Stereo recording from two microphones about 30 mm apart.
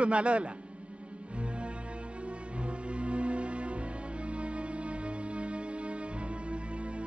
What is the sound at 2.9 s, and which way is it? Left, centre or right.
Music, right.